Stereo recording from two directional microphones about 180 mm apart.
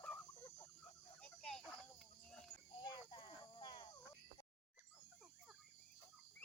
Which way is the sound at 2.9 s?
25° left (ahead or behind).